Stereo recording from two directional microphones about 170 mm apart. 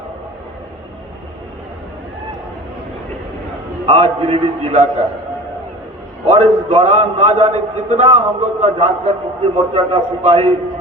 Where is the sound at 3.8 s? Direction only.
35° right (ahead or behind).